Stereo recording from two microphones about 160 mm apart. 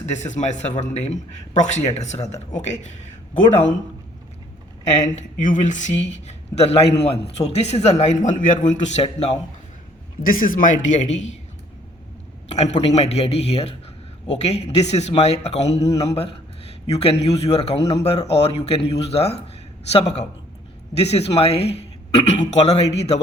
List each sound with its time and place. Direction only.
0.0 s speech: 45° left (ahead or behind)
4.9 s speech: 45° left (ahead or behind)
10.2 s speech: 60° left (ahead or behind)
12.5 s speech: 45° left (ahead or behind)